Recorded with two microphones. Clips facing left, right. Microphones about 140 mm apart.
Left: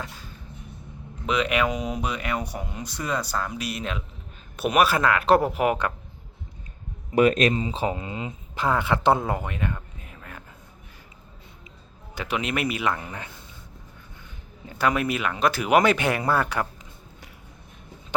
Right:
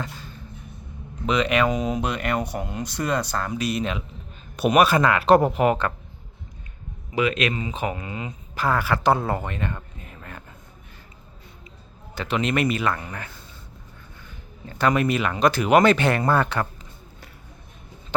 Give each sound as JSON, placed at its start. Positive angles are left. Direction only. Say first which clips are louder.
{"t": 1.3, "sound": "speech", "louder": "right 3 dB", "side_deg": 5}
{"t": 7.2, "sound": "speech", "louder": "left 4 dB", "side_deg": 45}
{"t": 12.1, "sound": "speech", "louder": "right 4 dB", "side_deg": 10}
{"t": 14.6, "sound": "speech", "louder": "right 3 dB", "side_deg": 10}